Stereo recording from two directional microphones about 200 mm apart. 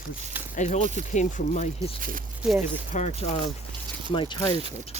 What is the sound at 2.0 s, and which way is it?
Speech, 45° right (ahead or behind).